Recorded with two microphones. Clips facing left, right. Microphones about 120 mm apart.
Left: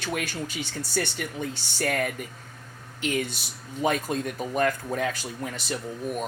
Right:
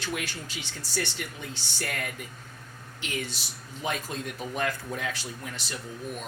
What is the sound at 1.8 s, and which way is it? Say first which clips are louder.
Speech: left 8 dB; 55° left (ahead or behind).